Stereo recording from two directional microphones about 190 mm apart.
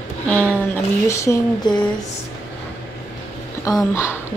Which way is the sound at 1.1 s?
15° left (ahead or behind).